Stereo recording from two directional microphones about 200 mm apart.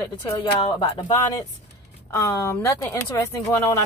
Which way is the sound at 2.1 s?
15° left (ahead or behind).